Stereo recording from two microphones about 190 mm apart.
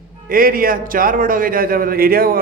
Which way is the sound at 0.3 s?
50° right (ahead or behind).